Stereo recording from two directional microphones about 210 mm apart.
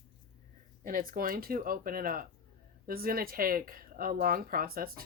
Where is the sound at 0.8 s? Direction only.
40° right (ahead or behind).